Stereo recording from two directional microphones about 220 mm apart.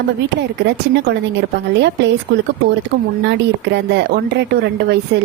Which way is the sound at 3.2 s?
50° right (ahead or behind).